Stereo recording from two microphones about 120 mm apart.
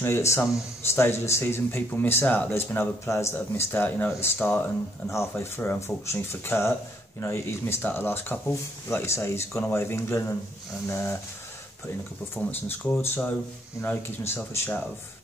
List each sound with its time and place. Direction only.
0.0 s speech: 20° left (ahead or behind)
12.4 s speech: 15° left (ahead or behind)